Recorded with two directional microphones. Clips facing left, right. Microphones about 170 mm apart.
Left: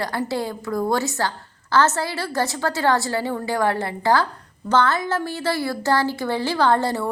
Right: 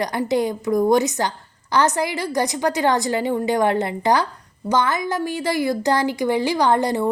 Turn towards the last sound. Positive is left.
turn(degrees=-15)  # may be behind; listen again after turning